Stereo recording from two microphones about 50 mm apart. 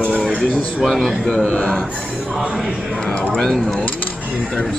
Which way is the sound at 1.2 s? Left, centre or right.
Left.